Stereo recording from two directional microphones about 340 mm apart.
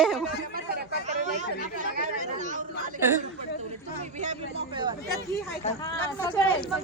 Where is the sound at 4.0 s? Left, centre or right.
Centre.